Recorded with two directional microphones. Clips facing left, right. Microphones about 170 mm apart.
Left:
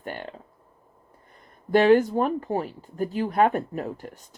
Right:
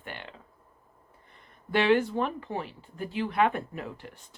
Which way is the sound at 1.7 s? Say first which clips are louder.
Left 6 dB; 40° left (ahead or behind).